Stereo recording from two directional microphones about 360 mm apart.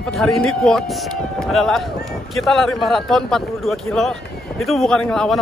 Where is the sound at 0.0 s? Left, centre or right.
Centre.